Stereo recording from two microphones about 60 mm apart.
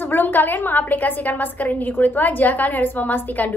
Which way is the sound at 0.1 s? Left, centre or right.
Left.